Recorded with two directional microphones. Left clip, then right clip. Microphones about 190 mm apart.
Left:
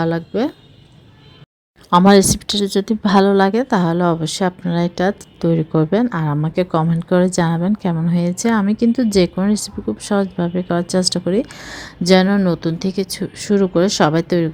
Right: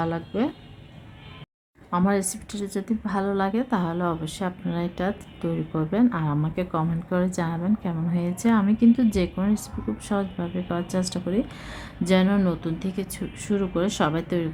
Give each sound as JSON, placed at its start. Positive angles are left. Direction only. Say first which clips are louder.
{"t": 0.0, "sound": "a woman's voice", "louder": "left 7 dB", "side_deg": 20}
{"t": 1.9, "sound": "a woman's voice", "louder": "left 14 dB", "side_deg": 35}